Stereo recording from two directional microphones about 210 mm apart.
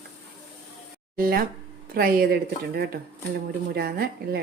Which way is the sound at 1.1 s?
45° right (ahead or behind).